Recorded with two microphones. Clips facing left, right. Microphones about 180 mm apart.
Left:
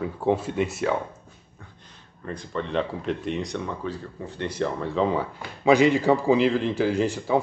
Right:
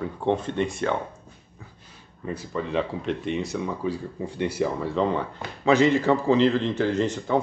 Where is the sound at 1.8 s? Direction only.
10° right (ahead or behind).